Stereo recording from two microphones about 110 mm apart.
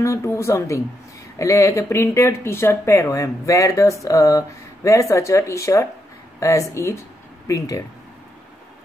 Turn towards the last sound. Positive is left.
turn(degrees=30)  # may be behind; listen again after turning